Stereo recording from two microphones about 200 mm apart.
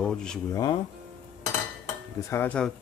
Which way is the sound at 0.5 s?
20° left (ahead or behind).